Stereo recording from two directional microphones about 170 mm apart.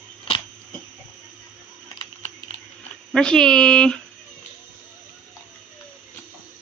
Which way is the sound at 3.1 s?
5° left (ahead or behind).